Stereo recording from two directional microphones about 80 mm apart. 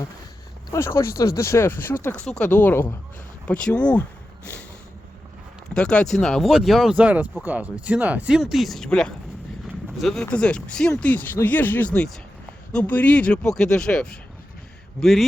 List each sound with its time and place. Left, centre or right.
0.7 s speech: left
2.2 s speech: centre
5.7 s speech: centre
6.5 s speech: centre
6.9 s speech: centre
8.4 s speech: centre
11.1 s speech: left; by 15.3 s centre